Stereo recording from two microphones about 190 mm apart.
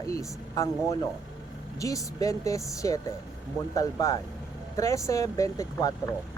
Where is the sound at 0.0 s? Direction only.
15° left (ahead or behind).